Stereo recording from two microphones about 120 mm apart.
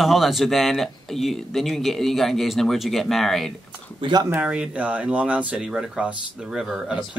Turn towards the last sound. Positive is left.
turn(degrees=-10)  # may be behind; listen again after turning